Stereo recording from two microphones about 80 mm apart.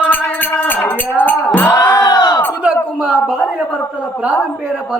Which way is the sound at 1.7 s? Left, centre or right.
Left.